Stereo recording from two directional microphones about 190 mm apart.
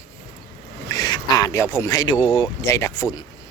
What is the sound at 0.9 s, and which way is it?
Speech, 20° left (ahead or behind).